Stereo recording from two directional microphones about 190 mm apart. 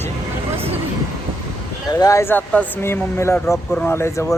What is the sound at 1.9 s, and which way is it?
Speech, 20° left (ahead or behind).